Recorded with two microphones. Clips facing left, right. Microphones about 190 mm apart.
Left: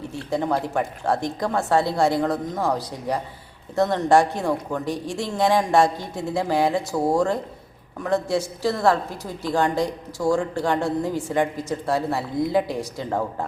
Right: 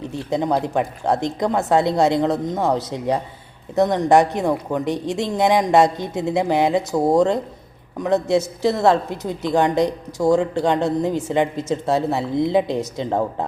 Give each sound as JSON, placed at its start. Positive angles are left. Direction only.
{"t": 0.0, "sound": "a woman's voice", "side_deg": -20}